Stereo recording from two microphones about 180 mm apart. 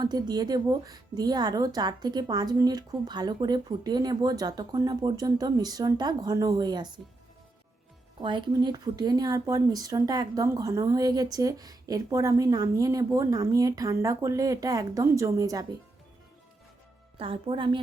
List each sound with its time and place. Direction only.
0.0 s speech: 20° right (ahead or behind)
8.2 s speech: 25° right (ahead or behind)
17.2 s speech: 30° right (ahead or behind)